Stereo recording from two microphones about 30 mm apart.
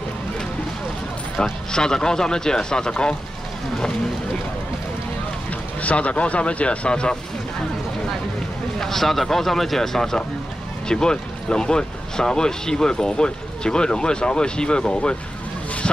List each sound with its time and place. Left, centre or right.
1.4 s speech: left
5.5 s speech: left
6.9 s speech: left
8.7 s speech: centre
10.9 s speech: left